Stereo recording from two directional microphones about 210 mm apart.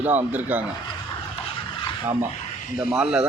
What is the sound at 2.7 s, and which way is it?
Speech, 5° right (ahead or behind).